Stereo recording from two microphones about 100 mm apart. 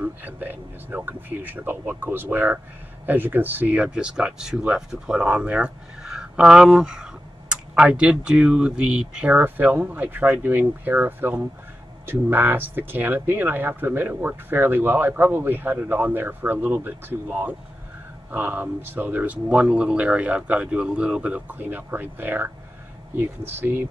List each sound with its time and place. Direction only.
0.0 s speech: 20° right (ahead or behind)